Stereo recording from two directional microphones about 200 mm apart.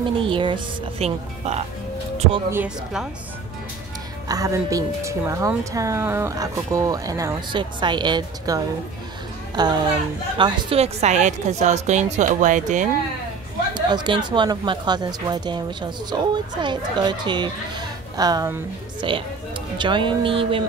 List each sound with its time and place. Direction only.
0.3 s a woman's voice: 25° right (ahead or behind)
2.5 s a woman's voice: 5° right (ahead or behind)
4.3 s a woman's voice: 15° right (ahead or behind); by 12.8 s 40° right (ahead or behind)
13.7 s a woman's voice: 20° right (ahead or behind)